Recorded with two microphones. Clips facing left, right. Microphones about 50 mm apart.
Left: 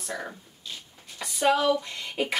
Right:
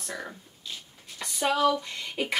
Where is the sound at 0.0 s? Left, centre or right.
Centre.